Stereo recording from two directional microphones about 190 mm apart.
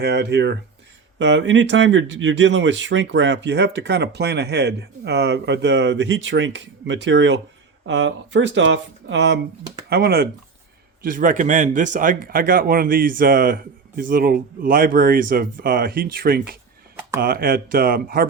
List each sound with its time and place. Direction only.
0.0 s speech: 60° right (ahead or behind)
9.9 s speech: 55° right (ahead or behind)
11.0 s speech: 45° right (ahead or behind)